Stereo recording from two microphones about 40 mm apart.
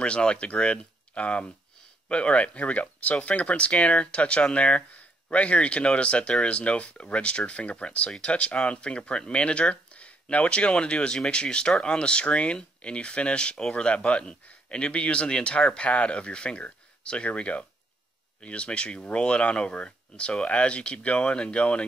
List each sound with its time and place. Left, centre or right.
0.0 s speech: left